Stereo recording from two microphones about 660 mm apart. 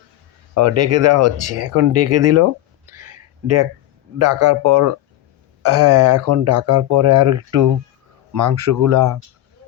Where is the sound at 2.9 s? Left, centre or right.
Right.